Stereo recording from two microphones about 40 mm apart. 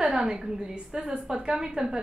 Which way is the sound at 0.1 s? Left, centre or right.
Centre.